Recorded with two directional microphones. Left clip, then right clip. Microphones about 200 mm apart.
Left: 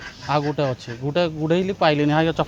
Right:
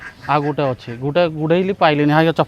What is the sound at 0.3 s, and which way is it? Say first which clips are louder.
Speech: right 4 dB; 35° right (ahead or behind).